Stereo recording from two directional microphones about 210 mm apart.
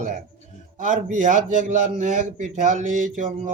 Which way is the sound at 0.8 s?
35° right (ahead or behind).